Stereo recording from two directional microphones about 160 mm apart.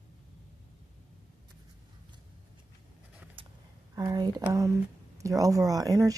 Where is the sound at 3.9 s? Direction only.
25° right (ahead or behind).